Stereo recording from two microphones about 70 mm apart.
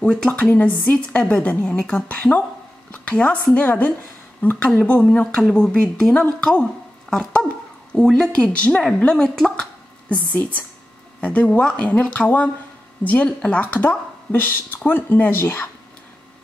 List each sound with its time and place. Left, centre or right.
0.0 s speech: centre
0.3 s a woman's voice: left; by 9.7 s centre
10.0 s a woman's voice: left